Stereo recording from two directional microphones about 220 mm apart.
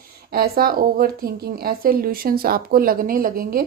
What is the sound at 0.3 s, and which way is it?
A woman's voice, 40° right (ahead or behind).